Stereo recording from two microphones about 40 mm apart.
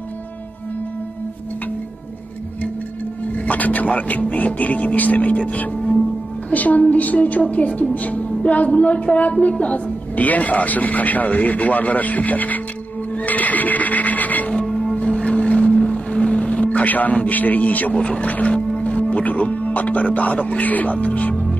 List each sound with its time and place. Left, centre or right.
3.3 s music: left
3.8 s speech: left
5.8 s music: centre
6.5 s speech: left
13.1 s music: left
14.7 s music: centre
15.0 s boat: centre
16.6 s a sound: left
17.3 s a man's voice: left